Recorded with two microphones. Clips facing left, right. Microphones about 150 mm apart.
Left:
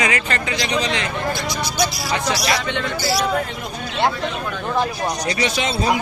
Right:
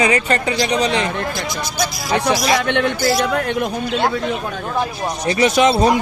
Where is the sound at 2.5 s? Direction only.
65° right (ahead or behind).